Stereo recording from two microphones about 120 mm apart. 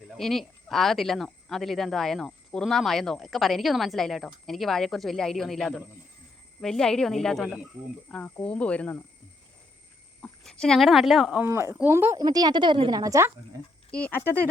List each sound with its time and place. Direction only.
0.2 s speech: centre (ahead or behind)
10.2 s speech: 10° left (ahead or behind)
11.4 s speech: 20° right (ahead or behind)
12.2 s a woman's voice: 35° right (ahead or behind)
13.0 s speech: 25° right (ahead or behind)
13.9 s speech: 15° left (ahead or behind)